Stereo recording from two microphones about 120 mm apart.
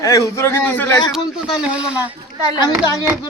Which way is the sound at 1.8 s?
10° right (ahead or behind).